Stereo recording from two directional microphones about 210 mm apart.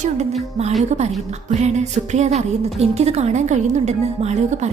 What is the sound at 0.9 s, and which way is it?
A woman's voice, 30° right (ahead or behind).